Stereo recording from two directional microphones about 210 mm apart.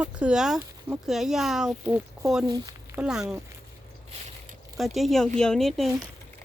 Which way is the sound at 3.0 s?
5° right (ahead or behind).